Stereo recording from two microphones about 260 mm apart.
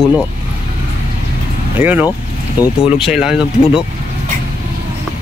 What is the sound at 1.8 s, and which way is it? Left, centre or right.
Speech, centre.